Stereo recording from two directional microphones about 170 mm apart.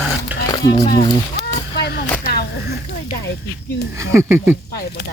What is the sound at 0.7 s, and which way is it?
Speech, 60° left (ahead or behind).